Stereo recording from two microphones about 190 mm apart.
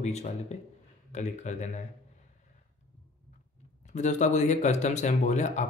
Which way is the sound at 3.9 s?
40° left (ahead or behind).